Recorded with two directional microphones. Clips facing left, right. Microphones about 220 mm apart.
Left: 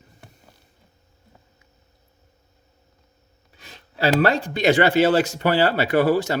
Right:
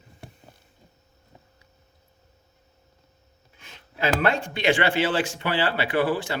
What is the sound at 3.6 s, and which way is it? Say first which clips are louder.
Speech: left 4 dB; 35° left (ahead or behind).